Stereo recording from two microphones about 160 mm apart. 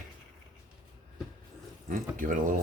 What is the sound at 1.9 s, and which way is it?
Speech, 55° right (ahead or behind).